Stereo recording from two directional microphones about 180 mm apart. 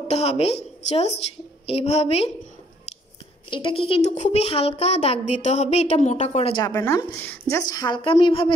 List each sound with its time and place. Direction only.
0.1 s a woman's voice: 35° left (ahead or behind)
3.4 s a woman's voice: 30° left (ahead or behind)
6.6 s a woman's voice: 20° left (ahead or behind)